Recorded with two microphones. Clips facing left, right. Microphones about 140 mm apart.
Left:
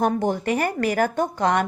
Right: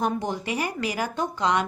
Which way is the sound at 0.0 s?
55° left (ahead or behind).